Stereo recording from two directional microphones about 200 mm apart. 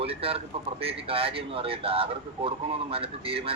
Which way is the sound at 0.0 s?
30° right (ahead or behind).